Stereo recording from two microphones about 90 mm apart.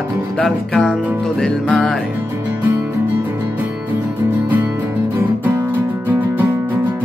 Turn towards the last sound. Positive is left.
turn(degrees=-20)  # may be behind; listen again after turning